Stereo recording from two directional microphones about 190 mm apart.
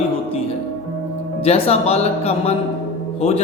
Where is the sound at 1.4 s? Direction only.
30° left (ahead or behind).